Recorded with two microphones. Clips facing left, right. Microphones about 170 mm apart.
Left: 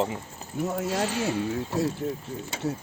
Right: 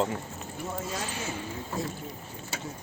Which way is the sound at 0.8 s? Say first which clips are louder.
Left 8 dB; 75° left (ahead or behind).